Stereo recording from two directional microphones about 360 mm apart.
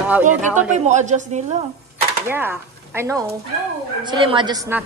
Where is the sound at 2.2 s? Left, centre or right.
Centre.